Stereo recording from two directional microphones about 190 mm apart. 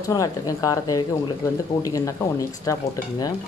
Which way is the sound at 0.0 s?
20° left (ahead or behind).